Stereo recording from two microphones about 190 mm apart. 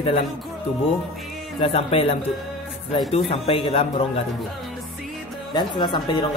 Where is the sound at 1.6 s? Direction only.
30° left (ahead or behind).